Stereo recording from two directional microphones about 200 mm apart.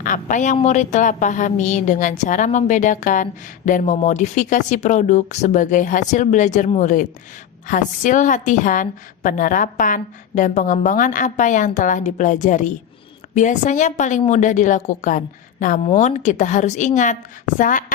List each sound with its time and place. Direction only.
0.0 s a woman's voice: 40° left (ahead or behind)